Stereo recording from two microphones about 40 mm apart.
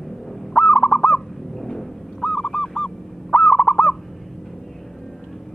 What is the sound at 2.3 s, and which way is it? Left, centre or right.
Goose, centre.